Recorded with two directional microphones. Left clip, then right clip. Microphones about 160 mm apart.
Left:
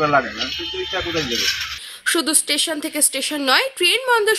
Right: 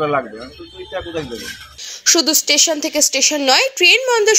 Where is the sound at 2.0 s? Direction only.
5° right (ahead or behind).